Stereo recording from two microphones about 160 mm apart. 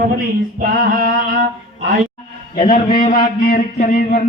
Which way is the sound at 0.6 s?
65° right (ahead or behind).